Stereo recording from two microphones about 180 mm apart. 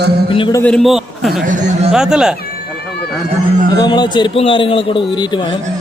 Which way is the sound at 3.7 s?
25° left (ahead or behind).